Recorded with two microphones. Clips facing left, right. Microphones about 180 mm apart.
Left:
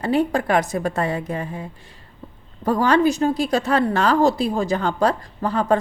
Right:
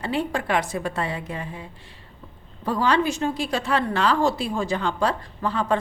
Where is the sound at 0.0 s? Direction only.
40° left (ahead or behind).